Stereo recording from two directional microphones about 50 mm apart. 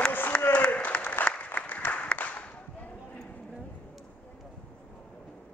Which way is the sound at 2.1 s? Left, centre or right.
Left.